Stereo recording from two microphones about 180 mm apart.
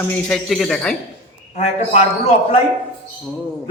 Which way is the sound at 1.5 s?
35° left (ahead or behind).